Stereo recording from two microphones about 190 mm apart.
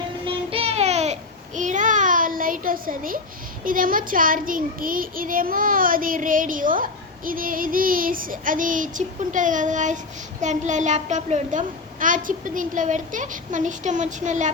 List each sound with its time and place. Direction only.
0.5 s a sound: 35° right (ahead or behind)
3.6 s child singing: 45° right (ahead or behind)
10.4 s a child's voice: 40° right (ahead or behind)